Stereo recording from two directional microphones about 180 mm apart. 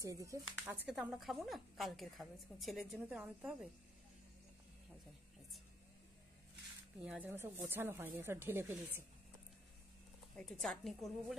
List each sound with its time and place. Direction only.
0.0 s speech: 15° right (ahead or behind)
0.8 s a woman's voice: 5° right (ahead or behind)
7.1 s speech: 10° right (ahead or behind)
10.3 s a woman's voice: centre (ahead or behind)